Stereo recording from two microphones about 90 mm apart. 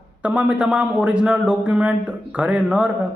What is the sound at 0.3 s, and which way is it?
A man's voice, 10° right (ahead or behind).